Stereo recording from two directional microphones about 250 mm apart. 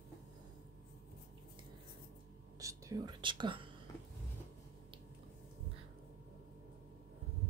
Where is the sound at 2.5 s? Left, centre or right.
Centre.